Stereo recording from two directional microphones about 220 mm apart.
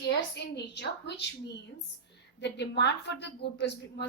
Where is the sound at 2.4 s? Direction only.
50° left (ahead or behind).